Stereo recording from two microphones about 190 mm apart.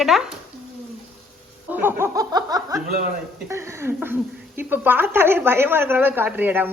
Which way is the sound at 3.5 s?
15° right (ahead or behind).